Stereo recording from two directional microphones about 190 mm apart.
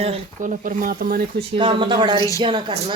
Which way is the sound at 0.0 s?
40° right (ahead or behind).